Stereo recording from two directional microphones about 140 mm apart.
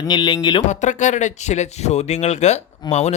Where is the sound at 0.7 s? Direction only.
60° left (ahead or behind).